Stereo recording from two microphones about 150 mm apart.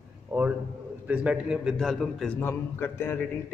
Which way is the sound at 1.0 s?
5° right (ahead or behind).